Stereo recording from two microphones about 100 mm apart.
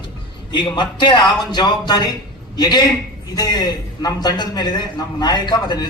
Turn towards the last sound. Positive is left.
turn(degrees=45)  # may be behind; listen again after turning